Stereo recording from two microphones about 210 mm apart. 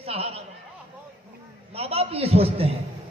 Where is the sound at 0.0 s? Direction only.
30° right (ahead or behind).